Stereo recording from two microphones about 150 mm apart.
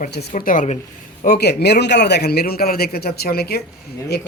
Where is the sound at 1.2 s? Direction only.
90° left.